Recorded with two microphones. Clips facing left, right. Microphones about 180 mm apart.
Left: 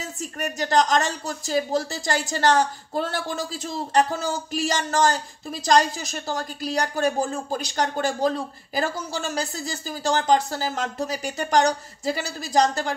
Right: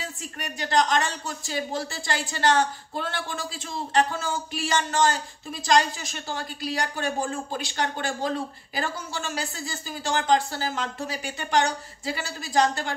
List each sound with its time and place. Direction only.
0.0 s speech: 40° left (ahead or behind)